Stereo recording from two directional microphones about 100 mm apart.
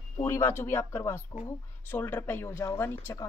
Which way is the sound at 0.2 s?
25° left (ahead or behind).